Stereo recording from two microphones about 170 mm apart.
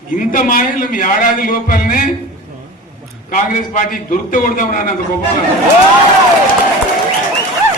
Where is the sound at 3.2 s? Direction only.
50° left (ahead or behind).